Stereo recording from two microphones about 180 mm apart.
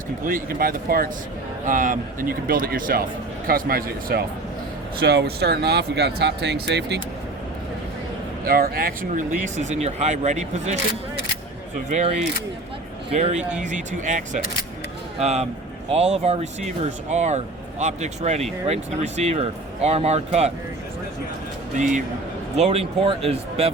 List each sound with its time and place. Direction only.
0.3 s speech: 50° right (ahead or behind); by 7.0 s 70° right (ahead or behind)
8.4 s speech: 55° right (ahead or behind); by 10.8 s 40° right (ahead or behind)
11.9 s speech: 40° right (ahead or behind)
21.8 s speech: 40° right (ahead or behind)